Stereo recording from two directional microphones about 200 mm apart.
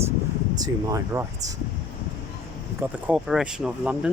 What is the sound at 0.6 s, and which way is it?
Speech, 15° right (ahead or behind).